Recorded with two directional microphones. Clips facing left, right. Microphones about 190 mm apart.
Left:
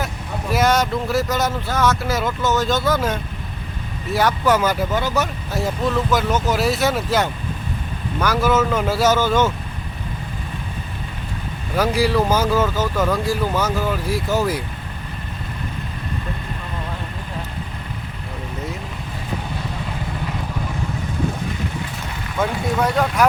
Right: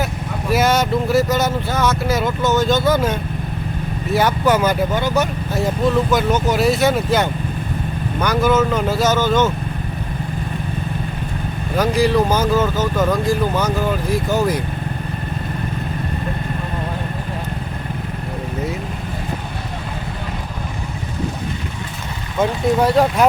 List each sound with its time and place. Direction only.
0.5 s speech: centre (ahead or behind)
11.8 s speech: 5° left (ahead or behind)
22.4 s speech: 25° right (ahead or behind)